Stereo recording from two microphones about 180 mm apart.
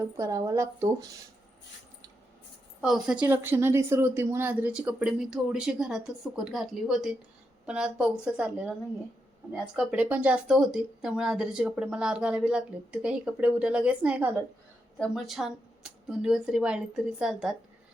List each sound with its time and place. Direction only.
0.0 s speech: 15° right (ahead or behind)
2.8 s speech: 5° right (ahead or behind)
9.7 s speech: 10° right (ahead or behind)